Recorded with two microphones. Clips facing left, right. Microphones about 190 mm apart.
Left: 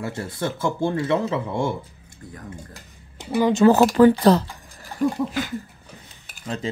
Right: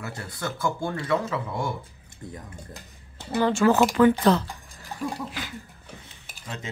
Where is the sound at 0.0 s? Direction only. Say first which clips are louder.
Left 6 dB; 25° left (ahead or behind).